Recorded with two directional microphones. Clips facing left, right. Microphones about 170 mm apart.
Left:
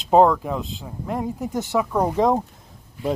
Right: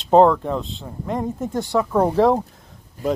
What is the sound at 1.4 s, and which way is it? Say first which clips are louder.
Speech: right 2 dB; 15° left (ahead or behind).